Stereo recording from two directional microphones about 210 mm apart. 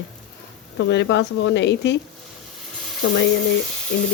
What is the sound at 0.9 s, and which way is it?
Speech, 55° left (ahead or behind).